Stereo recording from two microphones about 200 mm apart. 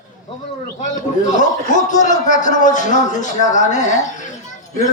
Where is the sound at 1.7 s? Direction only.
40° left (ahead or behind).